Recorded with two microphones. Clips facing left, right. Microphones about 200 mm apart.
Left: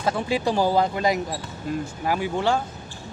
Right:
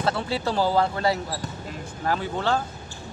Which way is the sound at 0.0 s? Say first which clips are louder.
Left 2 dB; 15° left (ahead or behind).